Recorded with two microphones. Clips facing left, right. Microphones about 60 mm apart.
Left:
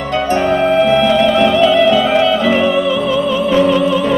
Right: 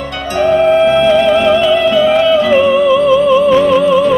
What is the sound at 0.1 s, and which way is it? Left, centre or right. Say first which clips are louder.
Music: left 1 dB; left.